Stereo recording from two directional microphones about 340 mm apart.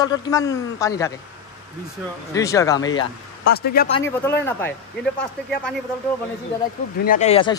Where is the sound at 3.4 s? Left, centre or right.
Left.